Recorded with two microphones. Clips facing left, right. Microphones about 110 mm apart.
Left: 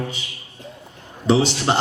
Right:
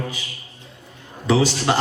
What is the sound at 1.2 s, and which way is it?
Speech, 25° left (ahead or behind).